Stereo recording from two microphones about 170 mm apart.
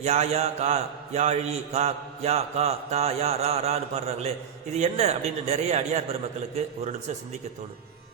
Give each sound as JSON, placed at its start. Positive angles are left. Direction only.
{"t": 0.0, "sound": "a man's voice", "side_deg": -40}